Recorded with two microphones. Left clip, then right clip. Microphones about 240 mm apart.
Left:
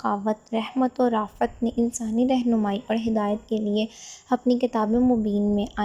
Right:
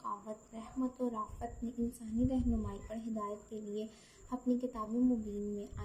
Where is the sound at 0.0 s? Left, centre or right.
Left.